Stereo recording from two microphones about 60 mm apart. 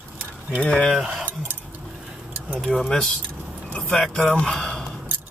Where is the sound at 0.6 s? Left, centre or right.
Centre.